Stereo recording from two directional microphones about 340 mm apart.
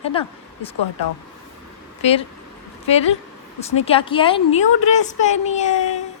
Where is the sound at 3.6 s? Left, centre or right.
Centre.